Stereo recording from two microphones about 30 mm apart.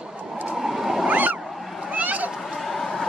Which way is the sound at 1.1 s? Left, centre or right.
Right.